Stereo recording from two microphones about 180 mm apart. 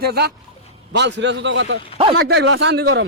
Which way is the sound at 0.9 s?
75° right (ahead or behind).